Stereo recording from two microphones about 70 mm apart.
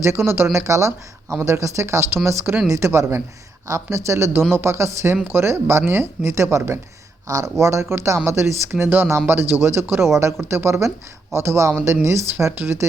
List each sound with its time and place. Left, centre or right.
0.0 s speech: right
7.3 s speech: right
7.6 s speech: right